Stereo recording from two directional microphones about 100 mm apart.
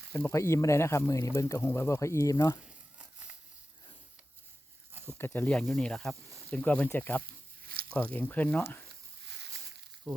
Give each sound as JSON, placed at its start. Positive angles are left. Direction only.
{"t": 0.3, "sound": "speech", "side_deg": 30}
{"t": 2.6, "sound": "crumpling", "side_deg": -15}
{"t": 5.1, "sound": "speech", "side_deg": 20}
{"t": 5.6, "sound": "speech", "side_deg": 5}